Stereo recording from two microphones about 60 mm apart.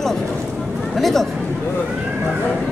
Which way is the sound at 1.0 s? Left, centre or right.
Centre.